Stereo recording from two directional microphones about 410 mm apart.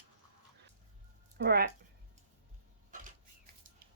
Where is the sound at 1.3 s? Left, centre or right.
Right.